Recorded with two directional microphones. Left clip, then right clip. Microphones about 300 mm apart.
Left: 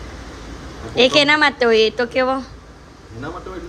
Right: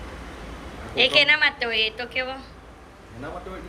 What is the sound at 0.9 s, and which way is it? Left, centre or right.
A woman's voice, centre.